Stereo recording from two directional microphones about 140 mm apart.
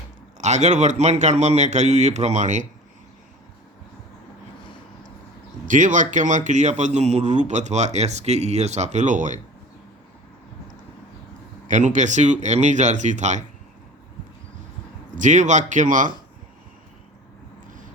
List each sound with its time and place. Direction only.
0.3 s a man's voice: 55° right (ahead or behind)
5.6 s a man's voice: 65° right (ahead or behind)
11.7 s a man's voice: 60° right (ahead or behind)
15.1 s a man's voice: 60° right (ahead or behind)